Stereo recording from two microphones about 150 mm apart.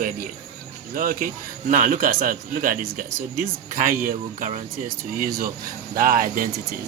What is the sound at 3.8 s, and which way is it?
Speech, 65° right (ahead or behind).